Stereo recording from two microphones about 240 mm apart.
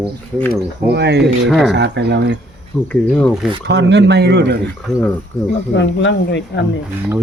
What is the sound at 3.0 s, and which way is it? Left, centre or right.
Speech, centre.